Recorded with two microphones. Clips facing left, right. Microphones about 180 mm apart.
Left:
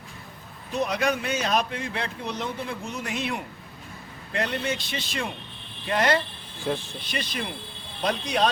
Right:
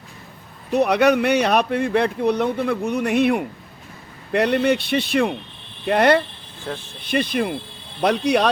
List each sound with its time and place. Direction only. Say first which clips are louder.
0.7 s speech: right 9 dB; 65° right (ahead or behind)
6.7 s speech: left 2 dB; 10° left (ahead or behind)
7.1 s speech: right 11 dB; 55° right (ahead or behind)
8.0 s speech: right 7 dB; 70° right (ahead or behind)